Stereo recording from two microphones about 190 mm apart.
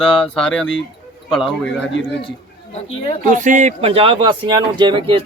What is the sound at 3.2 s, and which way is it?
Speech, 40° right (ahead or behind).